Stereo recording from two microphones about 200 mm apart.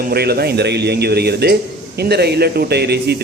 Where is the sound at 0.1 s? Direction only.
50° right (ahead or behind).